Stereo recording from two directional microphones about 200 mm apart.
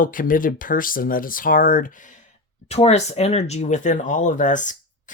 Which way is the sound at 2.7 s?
35° left (ahead or behind).